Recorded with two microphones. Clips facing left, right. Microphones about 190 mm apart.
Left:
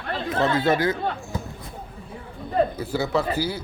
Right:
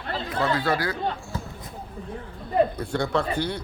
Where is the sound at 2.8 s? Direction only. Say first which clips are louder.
Left 1 dB; 5° left (ahead or behind).